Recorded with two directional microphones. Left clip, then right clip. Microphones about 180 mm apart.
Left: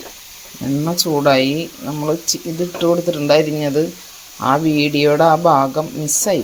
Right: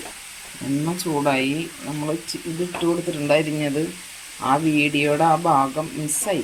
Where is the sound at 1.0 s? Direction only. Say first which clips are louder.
Left 9 dB; 45° left (ahead or behind).